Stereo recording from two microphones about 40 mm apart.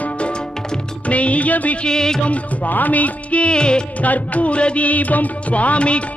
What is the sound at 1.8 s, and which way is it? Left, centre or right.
Music, centre.